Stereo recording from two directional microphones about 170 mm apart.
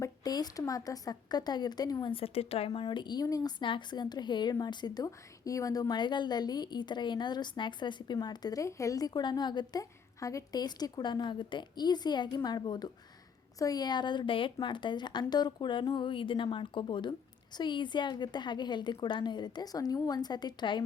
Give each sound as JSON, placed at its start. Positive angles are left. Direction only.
{"t": 0.0, "sound": "a woman's voice", "side_deg": 20}